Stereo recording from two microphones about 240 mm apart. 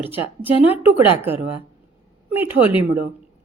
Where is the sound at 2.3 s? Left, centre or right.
Centre.